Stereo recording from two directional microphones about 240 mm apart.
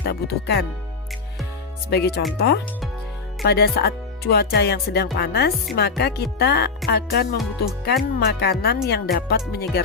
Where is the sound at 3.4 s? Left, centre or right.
Left.